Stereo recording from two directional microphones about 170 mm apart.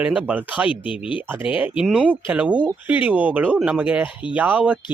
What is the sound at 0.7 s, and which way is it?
Speech, 30° left (ahead or behind).